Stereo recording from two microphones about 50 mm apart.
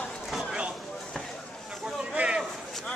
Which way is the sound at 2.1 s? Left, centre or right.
Right.